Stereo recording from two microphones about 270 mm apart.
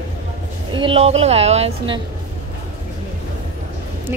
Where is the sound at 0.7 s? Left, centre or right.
Centre.